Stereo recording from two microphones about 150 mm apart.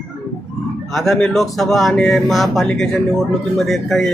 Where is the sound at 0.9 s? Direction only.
Centre (ahead or behind).